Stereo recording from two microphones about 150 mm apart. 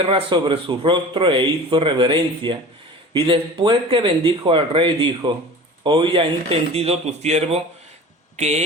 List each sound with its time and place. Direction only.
0.1 s speech: 30° right (ahead or behind); by 8.6 s 50° right (ahead or behind)